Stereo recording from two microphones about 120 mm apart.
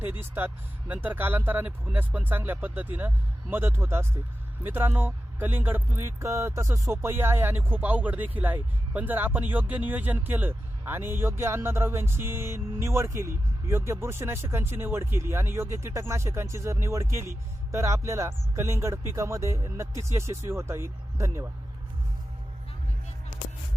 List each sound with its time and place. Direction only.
0.0 s speech: 15° right (ahead or behind)